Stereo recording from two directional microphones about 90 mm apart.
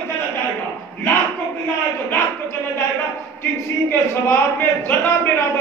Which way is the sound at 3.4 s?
20° left (ahead or behind).